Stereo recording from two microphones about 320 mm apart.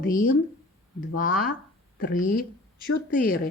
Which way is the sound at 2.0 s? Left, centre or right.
Left.